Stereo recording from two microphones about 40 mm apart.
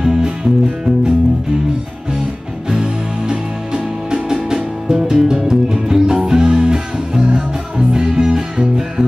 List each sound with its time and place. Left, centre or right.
0.0 s music: centre
2.7 s music: centre